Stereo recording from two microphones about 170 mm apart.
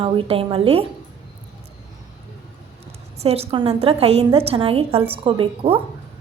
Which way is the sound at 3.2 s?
35° right (ahead or behind).